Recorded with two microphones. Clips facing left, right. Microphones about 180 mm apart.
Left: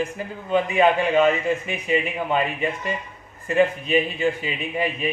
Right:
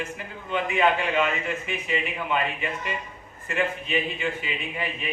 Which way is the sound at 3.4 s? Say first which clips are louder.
Left 8 dB; 40° left (ahead or behind).